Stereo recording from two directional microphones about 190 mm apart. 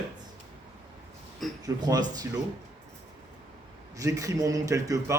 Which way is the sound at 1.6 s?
20° right (ahead or behind).